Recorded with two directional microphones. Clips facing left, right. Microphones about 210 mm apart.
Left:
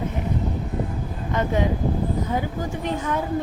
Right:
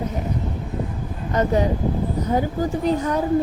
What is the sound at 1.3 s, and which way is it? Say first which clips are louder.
Speech: right 4 dB; 40° right (ahead or behind).